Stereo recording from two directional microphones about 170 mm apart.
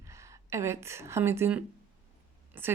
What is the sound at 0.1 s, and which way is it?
A woman's voice, 15° right (ahead or behind).